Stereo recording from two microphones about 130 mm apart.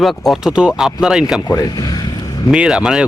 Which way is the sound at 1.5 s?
30° left (ahead or behind).